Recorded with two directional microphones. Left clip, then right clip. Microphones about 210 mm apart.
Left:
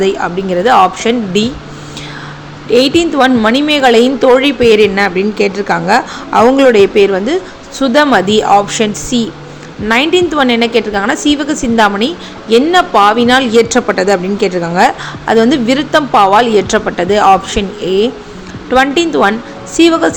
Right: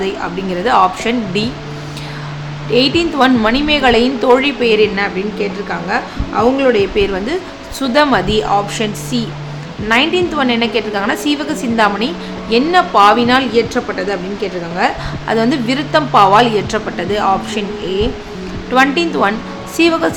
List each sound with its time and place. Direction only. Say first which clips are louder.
0.0 s a woman's voice: left 6 dB; 20° left (ahead or behind)
2.7 s a woman's voice: left 4 dB; 20° left (ahead or behind)
15.3 s a woman's voice: left 6 dB; 20° left (ahead or behind)